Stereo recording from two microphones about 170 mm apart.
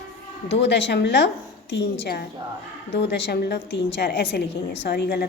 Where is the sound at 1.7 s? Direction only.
75° left (ahead or behind).